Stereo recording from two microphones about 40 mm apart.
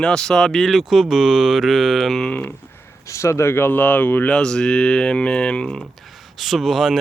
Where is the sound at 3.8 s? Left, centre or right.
Left.